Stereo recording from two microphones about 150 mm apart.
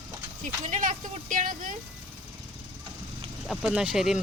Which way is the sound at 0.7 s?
60° right (ahead or behind).